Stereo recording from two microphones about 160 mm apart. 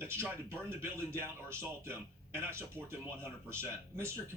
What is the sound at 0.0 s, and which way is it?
Speech, 15° right (ahead or behind).